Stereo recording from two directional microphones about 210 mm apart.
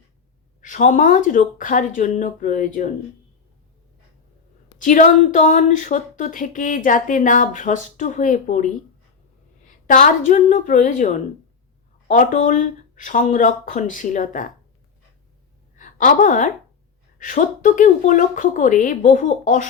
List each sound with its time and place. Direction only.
0.6 s speech: 35° left (ahead or behind)
4.8 s speech: 35° left (ahead or behind)
15.7 s a sound: 35° left (ahead or behind)
17.2 s speech: 40° left (ahead or behind)